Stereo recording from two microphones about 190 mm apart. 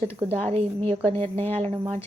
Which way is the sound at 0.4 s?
30° right (ahead or behind).